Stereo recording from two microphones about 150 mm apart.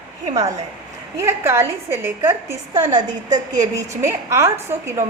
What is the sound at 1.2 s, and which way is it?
A woman's voice, 20° right (ahead or behind).